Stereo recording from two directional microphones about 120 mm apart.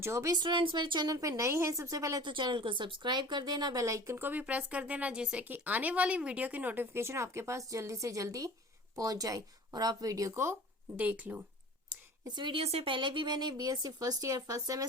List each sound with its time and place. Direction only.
0.0 s a woman's voice: 25° right (ahead or behind)
0.3 s a woman's voice: 40° right (ahead or behind)
2.2 s a woman's voice: 40° right (ahead or behind); by 11.4 s 15° right (ahead or behind)
12.2 s speech: 40° right (ahead or behind)
12.6 s speech: 50° right (ahead or behind); by 14.8 s 30° right (ahead or behind)